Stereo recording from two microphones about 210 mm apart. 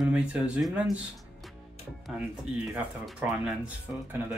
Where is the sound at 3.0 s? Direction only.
5° right (ahead or behind).